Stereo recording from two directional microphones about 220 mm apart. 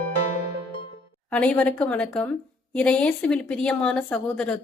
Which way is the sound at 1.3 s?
5° left (ahead or behind).